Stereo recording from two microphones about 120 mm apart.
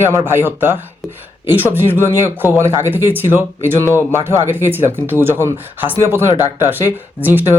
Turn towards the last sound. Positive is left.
turn(degrees=-15)  # may be behind; listen again after turning